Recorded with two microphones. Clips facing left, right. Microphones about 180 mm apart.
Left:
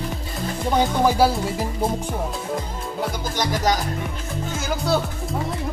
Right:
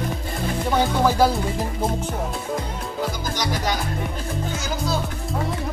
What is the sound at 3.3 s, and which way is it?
Speech, 40° left (ahead or behind).